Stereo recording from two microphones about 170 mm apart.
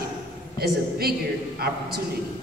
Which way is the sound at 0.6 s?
65° right (ahead or behind).